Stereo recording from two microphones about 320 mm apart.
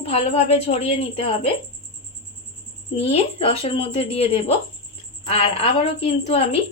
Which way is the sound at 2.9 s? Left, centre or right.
Centre.